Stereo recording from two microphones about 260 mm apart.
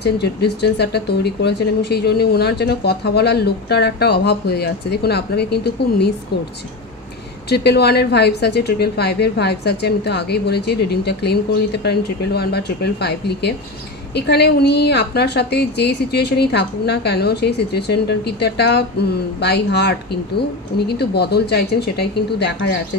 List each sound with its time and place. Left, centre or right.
0.0 s speech: left
7.4 s speech: left